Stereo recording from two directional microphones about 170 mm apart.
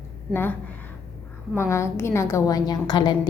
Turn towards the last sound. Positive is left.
turn(degrees=25)  # may be behind; listen again after turning